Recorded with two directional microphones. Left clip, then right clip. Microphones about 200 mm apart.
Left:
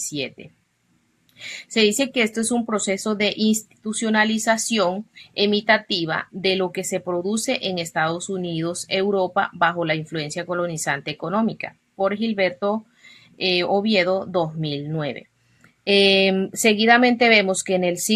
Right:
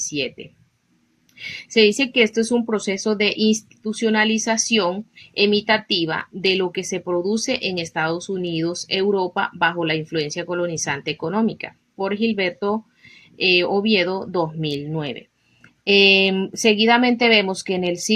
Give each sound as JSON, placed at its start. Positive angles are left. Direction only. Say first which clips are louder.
{"t": 0.1, "sound": "a woman's voice", "louder": "right 3 dB", "side_deg": 15}